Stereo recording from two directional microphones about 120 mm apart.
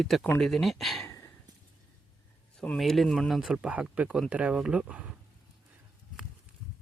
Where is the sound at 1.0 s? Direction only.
25° left (ahead or behind).